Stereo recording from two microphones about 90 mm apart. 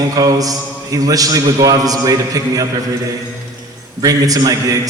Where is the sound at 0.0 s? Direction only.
45° right (ahead or behind).